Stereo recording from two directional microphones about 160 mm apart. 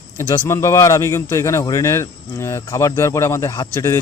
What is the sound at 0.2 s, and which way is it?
A man's voice, 20° left (ahead or behind).